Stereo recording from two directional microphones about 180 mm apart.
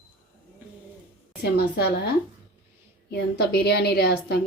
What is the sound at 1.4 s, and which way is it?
Speech, 60° left (ahead or behind).